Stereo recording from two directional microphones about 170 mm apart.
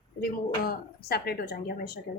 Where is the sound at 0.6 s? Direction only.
65° left (ahead or behind).